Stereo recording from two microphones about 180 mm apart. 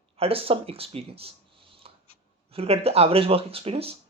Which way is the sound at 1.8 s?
30° right (ahead or behind).